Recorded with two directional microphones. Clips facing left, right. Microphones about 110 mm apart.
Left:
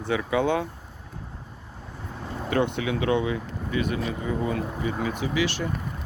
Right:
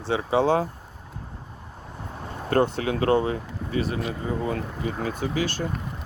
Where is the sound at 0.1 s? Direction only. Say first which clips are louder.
Right 2 dB; 30° right (ahead or behind).